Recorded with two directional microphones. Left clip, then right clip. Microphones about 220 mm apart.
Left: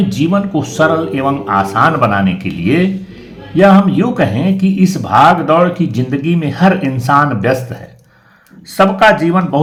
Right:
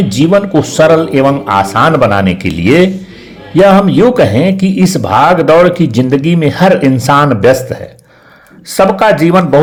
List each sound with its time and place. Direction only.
0.1 s speech: 30° right (ahead or behind)
8.7 s speech: 35° right (ahead or behind)